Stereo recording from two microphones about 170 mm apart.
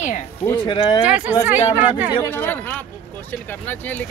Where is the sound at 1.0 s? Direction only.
10° right (ahead or behind).